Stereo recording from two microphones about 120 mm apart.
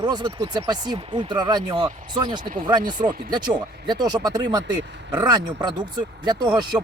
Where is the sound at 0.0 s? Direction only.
35° right (ahead or behind).